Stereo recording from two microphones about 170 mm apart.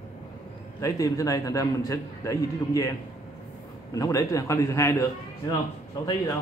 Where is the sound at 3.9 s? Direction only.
20° left (ahead or behind).